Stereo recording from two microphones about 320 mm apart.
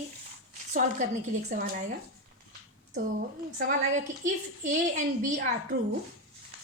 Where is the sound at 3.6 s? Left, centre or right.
Right.